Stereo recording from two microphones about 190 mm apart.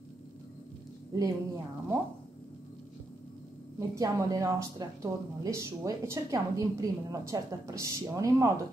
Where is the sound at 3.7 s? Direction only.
15° right (ahead or behind).